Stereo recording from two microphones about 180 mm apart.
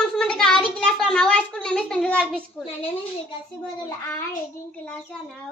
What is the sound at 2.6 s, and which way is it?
Speech, 30° left (ahead or behind).